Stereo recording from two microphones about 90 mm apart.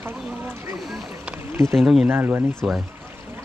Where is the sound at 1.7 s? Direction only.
5° right (ahead or behind).